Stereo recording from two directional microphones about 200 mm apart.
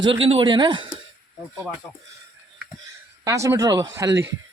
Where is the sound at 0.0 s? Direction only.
25° right (ahead or behind).